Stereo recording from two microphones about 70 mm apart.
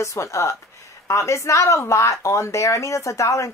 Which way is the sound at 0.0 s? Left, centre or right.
Left.